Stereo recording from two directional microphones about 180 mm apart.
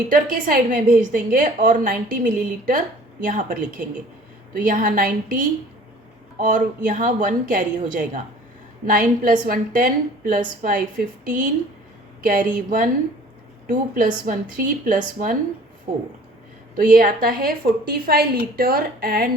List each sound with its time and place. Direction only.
0.1 s a woman's voice: 50° right (ahead or behind)
16.7 s a woman's voice: 50° right (ahead or behind)